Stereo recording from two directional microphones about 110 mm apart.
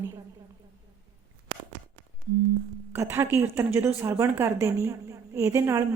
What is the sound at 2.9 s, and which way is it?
A woman's voice, 20° right (ahead or behind).